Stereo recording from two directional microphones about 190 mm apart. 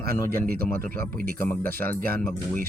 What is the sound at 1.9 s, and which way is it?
Speech, 50° right (ahead or behind).